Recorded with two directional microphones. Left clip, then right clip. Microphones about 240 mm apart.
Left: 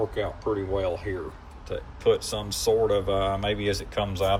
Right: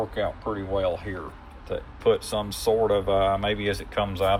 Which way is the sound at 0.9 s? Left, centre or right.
Left.